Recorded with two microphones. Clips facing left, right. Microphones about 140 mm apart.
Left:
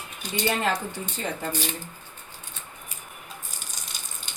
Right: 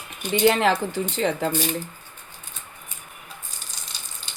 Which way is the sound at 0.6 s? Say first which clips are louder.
Right 6 dB; 85° right.